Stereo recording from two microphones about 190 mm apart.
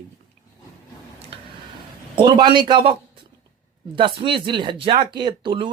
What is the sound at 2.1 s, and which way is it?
Speech, 25° right (ahead or behind).